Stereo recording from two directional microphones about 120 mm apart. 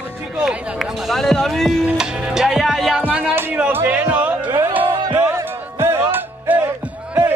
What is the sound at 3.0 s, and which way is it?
Music, 15° right (ahead or behind).